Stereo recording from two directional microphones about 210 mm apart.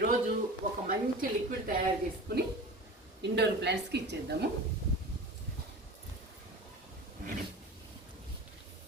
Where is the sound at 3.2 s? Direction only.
55° right (ahead or behind).